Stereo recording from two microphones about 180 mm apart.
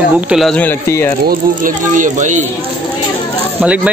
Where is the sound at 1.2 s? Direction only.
45° right (ahead or behind).